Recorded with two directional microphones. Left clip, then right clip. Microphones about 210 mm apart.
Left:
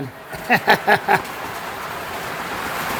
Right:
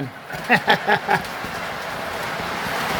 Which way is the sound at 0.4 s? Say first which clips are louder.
Left 2 dB; 15° left (ahead or behind).